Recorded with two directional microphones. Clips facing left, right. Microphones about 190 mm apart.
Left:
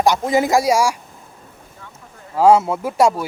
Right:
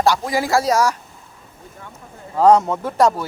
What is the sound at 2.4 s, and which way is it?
Speech, 5° left (ahead or behind).